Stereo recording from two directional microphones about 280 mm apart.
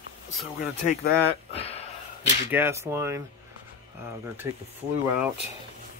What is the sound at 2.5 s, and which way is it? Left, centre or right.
Speech, centre.